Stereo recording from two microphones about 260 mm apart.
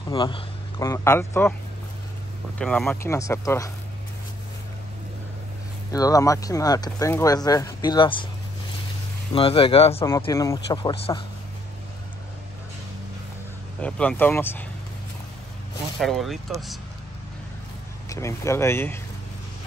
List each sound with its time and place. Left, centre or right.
0.1 s speech: centre
2.6 s speech: centre
5.9 s speech: centre
9.3 s speech: left
13.7 s speech: centre
16.0 s speech: centre
18.1 s speech: centre